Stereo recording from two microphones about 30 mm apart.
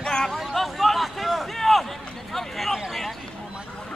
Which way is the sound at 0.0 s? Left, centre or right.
Left.